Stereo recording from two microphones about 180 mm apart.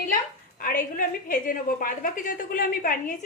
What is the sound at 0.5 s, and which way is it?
A woman's voice, 50° left (ahead or behind).